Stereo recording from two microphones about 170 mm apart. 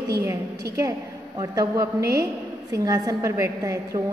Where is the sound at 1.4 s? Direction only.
20° right (ahead or behind).